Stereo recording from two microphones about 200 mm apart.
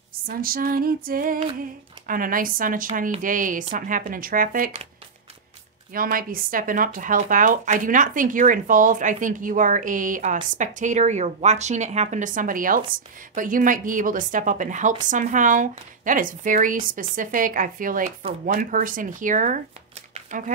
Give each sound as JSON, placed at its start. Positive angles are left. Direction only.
{"t": 0.3, "sound": "speech", "side_deg": -45}
{"t": 5.9, "sound": "speech", "side_deg": -45}
{"t": 20.2, "sound": "a sound", "side_deg": -40}